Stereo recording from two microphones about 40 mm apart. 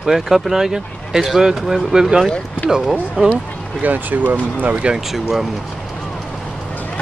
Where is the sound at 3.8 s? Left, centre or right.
Right.